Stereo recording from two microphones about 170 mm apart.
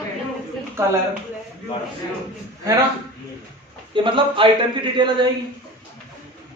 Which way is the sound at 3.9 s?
30° right (ahead or behind).